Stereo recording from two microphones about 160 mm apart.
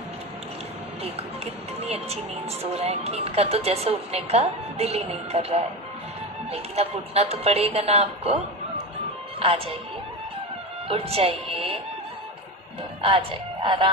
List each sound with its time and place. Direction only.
1.0 s a woman's voice: 40° right (ahead or behind)
10.9 s a woman's voice: 35° right (ahead or behind)
13.0 s speech: 35° right (ahead or behind)